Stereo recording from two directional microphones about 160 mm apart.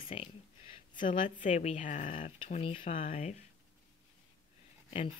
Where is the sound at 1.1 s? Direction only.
50° left (ahead or behind).